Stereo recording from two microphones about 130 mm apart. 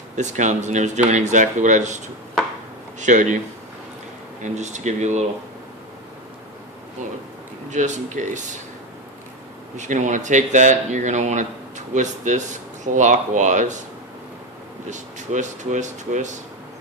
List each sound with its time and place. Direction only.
0.2 s speech: 65° right (ahead or behind)
3.0 s speech: 70° right (ahead or behind)
4.4 s speech: 65° right (ahead or behind)
7.7 s speech: 65° right (ahead or behind)
9.7 s speech: 65° right (ahead or behind)
14.8 s speech: 65° right (ahead or behind)